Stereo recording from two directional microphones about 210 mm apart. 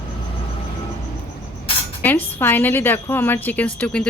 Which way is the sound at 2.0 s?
10° left (ahead or behind).